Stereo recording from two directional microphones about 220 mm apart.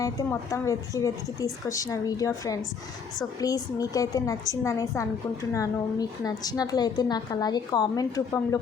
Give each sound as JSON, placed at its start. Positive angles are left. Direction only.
{"t": 0.0, "sound": "a woman's voice", "side_deg": 15}